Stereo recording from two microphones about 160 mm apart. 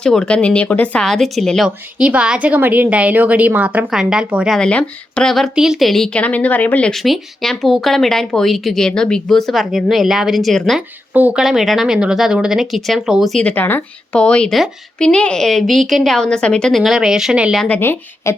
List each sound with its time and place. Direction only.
0.0 s speech: 5° left (ahead or behind)
11.1 s speech: 10° right (ahead or behind)
17.7 s a woman's voice: 15° left (ahead or behind)